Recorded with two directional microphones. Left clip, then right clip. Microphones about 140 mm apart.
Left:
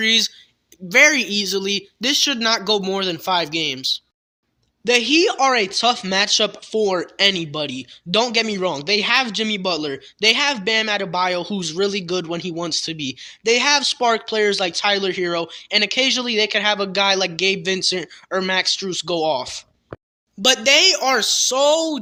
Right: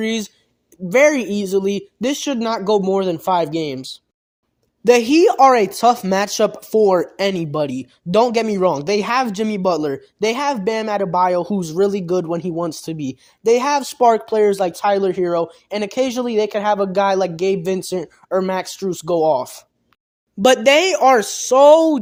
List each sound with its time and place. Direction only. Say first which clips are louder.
0.0 s speech: left 6 dB; 35° right (ahead or behind)
3.2 s speech: right 2 dB; 40° right (ahead or behind)
4.8 s speech: right 4 dB; 75° right (ahead or behind); by 6.0 s 55° right (ahead or behind)
6.0 s speech: right 1 dB; 30° right (ahead or behind)
6.2 s a man's voice: right 1 dB; 55° right (ahead or behind)
20.4 s speech: right 3 dB; 75° right (ahead or behind)
21.0 s speech: right 4 dB; 60° right (ahead or behind)